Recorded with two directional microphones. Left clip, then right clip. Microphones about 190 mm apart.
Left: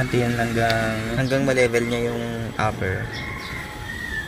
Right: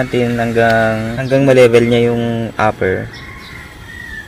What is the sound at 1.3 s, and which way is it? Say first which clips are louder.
Speech: right 12 dB; 40° left (ahead or behind).